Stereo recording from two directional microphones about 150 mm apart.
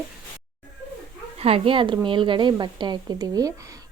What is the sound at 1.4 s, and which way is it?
A woman's voice, 40° right (ahead or behind).